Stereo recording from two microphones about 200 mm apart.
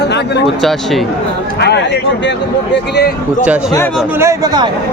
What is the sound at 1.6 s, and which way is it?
Speech, 55° left (ahead or behind).